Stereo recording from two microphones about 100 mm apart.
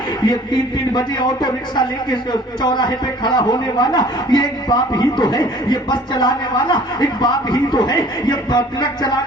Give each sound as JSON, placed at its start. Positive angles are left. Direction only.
{"t": 0.3, "sound": "speech", "side_deg": 50}